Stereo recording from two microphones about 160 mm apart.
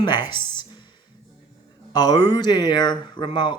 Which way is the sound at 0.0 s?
30° left (ahead or behind).